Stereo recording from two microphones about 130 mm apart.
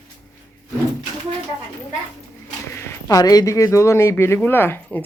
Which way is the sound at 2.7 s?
25° left (ahead or behind).